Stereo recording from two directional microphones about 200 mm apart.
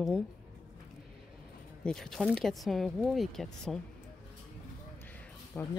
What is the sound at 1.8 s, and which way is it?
Speech, 5° left (ahead or behind).